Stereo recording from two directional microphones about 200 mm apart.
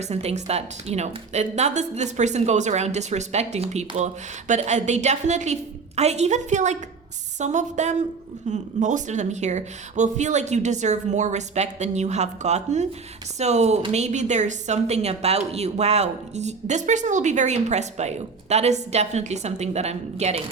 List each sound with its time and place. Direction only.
0.0 s a woman's voice: 30° right (ahead or behind)